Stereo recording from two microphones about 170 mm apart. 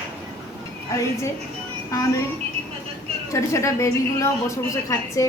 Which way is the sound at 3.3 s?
15° left (ahead or behind).